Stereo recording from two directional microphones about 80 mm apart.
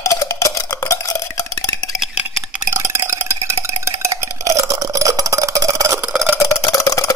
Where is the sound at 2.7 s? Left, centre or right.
Right.